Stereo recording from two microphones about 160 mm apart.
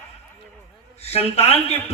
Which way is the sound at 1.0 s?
40° left (ahead or behind).